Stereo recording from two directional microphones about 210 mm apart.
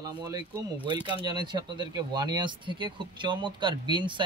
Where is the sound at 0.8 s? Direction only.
20° right (ahead or behind).